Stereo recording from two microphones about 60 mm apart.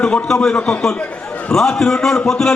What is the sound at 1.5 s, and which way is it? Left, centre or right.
A man's voice, centre.